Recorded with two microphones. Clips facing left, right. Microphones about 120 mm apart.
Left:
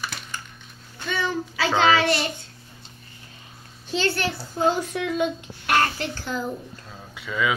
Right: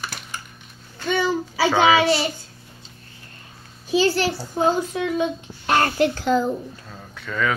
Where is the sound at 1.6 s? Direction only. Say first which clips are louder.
Right 3 dB; 10° right (ahead or behind).